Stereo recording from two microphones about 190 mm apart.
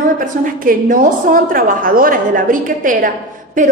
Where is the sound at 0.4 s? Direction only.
45° right (ahead or behind).